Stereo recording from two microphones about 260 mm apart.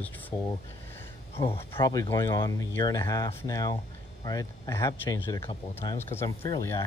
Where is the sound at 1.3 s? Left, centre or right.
Left.